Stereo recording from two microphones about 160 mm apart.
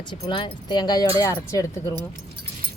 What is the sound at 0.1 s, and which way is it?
Speech, 30° left (ahead or behind).